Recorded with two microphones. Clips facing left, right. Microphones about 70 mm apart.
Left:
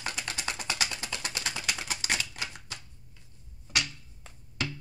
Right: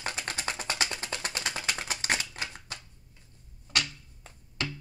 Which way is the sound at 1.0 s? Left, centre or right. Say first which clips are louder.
Right 1 dB; right.